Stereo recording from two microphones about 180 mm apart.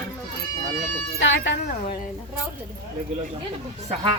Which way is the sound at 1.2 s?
90° left.